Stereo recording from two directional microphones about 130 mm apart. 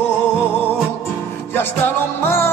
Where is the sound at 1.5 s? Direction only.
15° left (ahead or behind).